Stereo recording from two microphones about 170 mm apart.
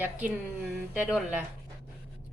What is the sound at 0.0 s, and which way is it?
Speech, 10° right (ahead or behind).